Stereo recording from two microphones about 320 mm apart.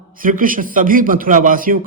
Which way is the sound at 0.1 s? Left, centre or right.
Right.